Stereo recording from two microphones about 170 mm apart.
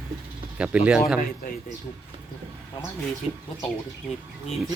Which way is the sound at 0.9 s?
5° right (ahead or behind).